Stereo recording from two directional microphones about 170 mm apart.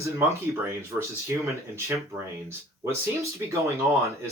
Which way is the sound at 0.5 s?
15° right (ahead or behind).